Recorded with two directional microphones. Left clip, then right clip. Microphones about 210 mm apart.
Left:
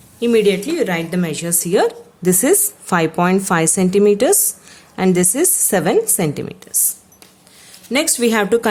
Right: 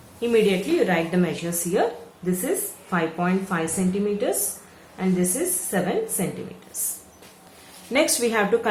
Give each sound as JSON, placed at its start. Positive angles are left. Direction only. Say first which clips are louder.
{"t": 0.2, "sound": "a woman's voice", "louder": "left 6 dB", "side_deg": 55}
{"t": 7.9, "sound": "speech", "louder": "left 5 dB", "side_deg": 50}